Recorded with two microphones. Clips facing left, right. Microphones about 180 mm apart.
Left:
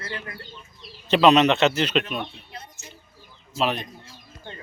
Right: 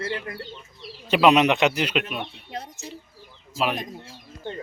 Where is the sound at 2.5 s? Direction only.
90° right.